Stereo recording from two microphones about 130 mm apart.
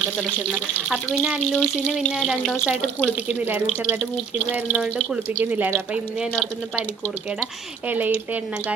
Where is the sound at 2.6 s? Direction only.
Centre (ahead or behind).